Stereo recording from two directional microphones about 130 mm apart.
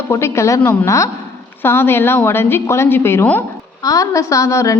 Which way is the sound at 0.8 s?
25° left (ahead or behind).